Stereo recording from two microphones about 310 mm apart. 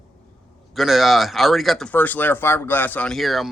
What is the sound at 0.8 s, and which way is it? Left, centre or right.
Speech, centre.